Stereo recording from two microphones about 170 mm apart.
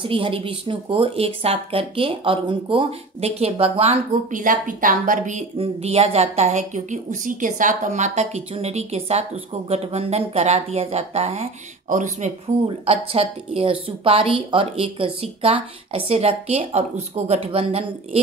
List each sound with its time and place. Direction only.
0.0 s speech: 30° right (ahead or behind)
4.3 s speech: 50° right (ahead or behind)
12.6 s speech: 35° right (ahead or behind)